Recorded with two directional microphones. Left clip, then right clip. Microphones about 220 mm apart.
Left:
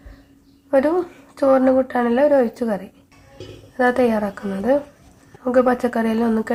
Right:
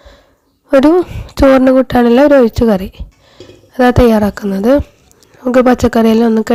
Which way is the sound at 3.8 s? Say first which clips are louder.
Right 8 dB; 40° right (ahead or behind).